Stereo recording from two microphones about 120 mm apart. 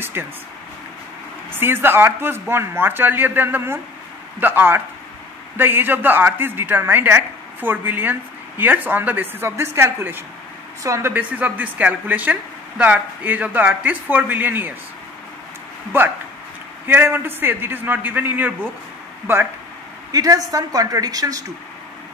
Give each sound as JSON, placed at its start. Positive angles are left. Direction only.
{"t": 0.2, "sound": "a woman's voice", "side_deg": -20}
{"t": 1.5, "sound": "a woman's voice", "side_deg": -20}
{"t": 15.9, "sound": "a woman's voice", "side_deg": -20}
{"t": 20.1, "sound": "speech", "side_deg": -30}